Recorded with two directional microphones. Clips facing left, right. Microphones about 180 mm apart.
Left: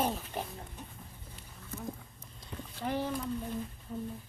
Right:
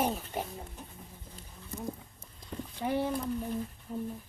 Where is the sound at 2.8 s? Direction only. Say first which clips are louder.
Right 3 dB; 15° right (ahead or behind).